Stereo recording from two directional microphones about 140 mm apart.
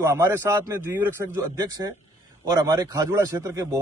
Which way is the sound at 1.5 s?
25° right (ahead or behind).